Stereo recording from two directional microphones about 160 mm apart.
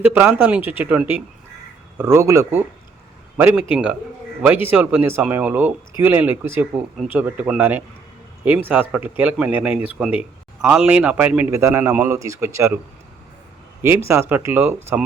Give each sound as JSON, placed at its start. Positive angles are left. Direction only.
{"t": 0.0, "sound": "speech", "side_deg": -10}
{"t": 14.1, "sound": "speech", "side_deg": -15}